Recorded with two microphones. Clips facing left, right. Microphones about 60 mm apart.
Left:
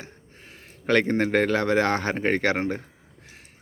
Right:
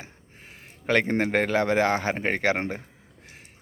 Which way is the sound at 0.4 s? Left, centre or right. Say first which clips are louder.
Left 1 dB; centre.